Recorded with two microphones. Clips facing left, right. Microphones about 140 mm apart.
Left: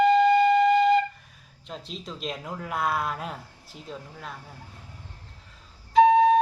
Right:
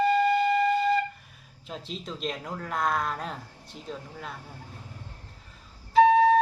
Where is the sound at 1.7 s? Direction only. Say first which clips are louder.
Right 1 dB; centre (ahead or behind).